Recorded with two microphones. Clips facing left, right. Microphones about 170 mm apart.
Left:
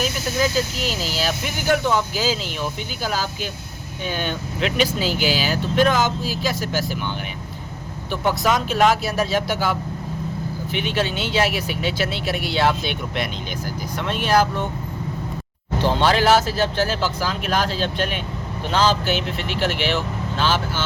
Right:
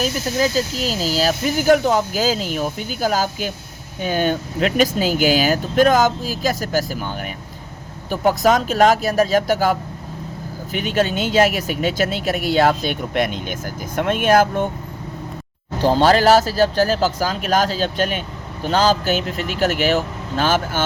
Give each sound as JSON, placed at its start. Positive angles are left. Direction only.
{"t": 0.0, "sound": "speech", "side_deg": -35}
{"t": 15.8, "sound": "speech", "side_deg": -40}